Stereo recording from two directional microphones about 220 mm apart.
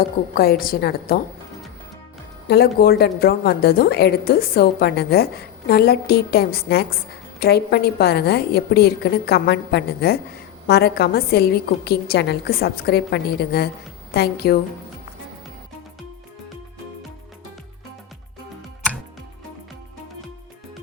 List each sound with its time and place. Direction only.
0.3 s a woman's voice: 45° left (ahead or behind)
2.5 s a woman's voice: 45° left (ahead or behind)